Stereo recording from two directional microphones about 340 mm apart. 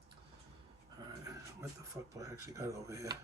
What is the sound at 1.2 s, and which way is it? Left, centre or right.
Speech, centre.